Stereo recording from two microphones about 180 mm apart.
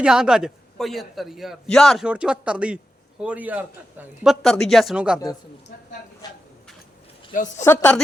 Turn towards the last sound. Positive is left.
turn(degrees=15)  # may be behind; listen again after turning